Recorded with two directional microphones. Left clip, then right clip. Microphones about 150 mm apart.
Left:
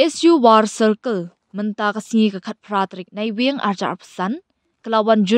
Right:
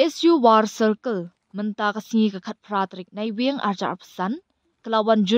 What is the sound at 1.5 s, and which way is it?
Speech, 25° left (ahead or behind).